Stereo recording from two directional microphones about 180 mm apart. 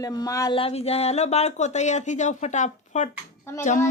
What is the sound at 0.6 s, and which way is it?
A child's voice, 35° left (ahead or behind).